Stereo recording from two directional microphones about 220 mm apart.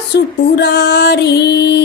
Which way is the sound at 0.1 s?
50° left (ahead or behind).